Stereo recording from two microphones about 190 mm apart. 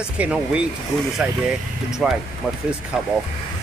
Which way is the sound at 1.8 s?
5° right (ahead or behind).